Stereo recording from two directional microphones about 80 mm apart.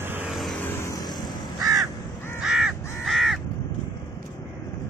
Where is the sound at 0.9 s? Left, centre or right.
Left.